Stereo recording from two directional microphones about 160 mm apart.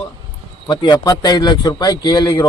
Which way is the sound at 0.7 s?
25° left (ahead or behind).